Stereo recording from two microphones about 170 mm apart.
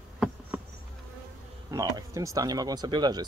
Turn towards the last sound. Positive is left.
turn(degrees=-25)  # may be behind; listen again after turning